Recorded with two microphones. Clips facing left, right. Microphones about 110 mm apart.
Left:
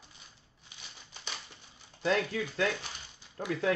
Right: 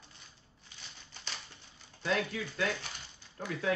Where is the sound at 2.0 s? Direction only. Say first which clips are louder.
Left 3 dB; 40° left (ahead or behind).